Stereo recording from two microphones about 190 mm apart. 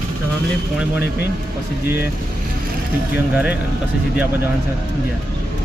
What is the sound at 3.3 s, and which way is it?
Speech, 5° right (ahead or behind).